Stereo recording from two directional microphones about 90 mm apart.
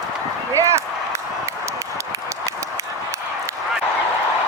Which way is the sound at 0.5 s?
35° right (ahead or behind).